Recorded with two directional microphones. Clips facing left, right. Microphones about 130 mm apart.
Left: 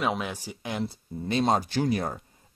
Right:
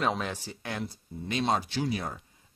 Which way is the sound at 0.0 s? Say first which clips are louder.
Left 1 dB; 10° left (ahead or behind).